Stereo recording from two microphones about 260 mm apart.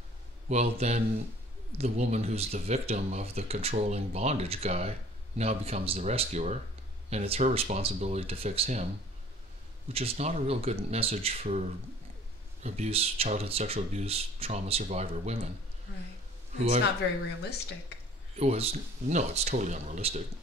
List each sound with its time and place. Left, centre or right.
0.5 s speech: right
9.9 s speech: right
12.6 s speech: right
16.5 s speech: right
18.3 s speech: right